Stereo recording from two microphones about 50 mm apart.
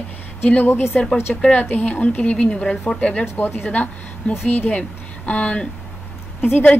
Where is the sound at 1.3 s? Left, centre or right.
Centre.